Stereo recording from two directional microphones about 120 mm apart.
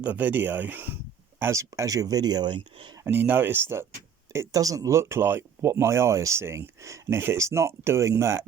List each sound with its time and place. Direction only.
0.0 s speech: 15° right (ahead or behind); by 2.9 s 45° right (ahead or behind)
2.9 s speech: 20° right (ahead or behind)